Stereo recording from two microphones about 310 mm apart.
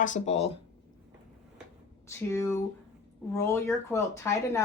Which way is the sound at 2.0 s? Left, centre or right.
Centre.